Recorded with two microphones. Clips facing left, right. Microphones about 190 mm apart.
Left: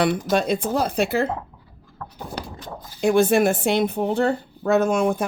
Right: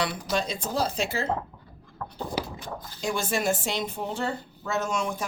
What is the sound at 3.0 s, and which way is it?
Speech, 60° left (ahead or behind).